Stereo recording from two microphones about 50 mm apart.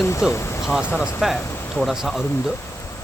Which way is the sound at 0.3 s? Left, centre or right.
Left.